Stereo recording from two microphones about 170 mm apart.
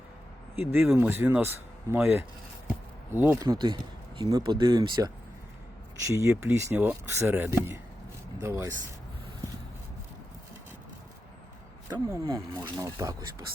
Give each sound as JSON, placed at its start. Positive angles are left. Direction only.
{"t": 0.5, "sound": "speech", "side_deg": -15}
{"t": 11.9, "sound": "speech", "side_deg": -20}